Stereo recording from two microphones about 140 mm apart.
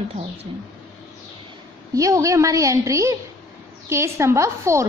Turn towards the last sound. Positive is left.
turn(degrees=-20)  # may be behind; listen again after turning